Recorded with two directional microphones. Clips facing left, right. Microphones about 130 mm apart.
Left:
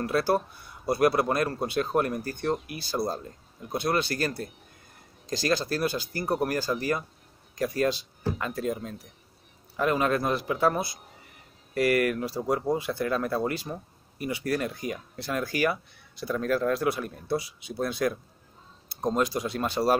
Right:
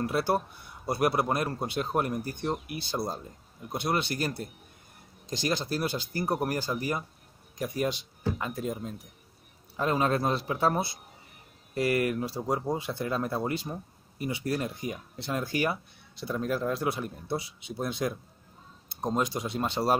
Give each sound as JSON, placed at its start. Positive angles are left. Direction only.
{"t": 0.0, "sound": "speech", "side_deg": -20}